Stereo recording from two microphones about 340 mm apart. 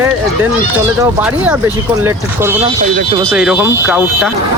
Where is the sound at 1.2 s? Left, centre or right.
Centre.